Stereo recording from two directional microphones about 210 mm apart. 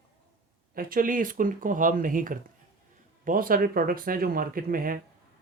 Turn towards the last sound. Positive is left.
turn(degrees=-40)  # may be behind; listen again after turning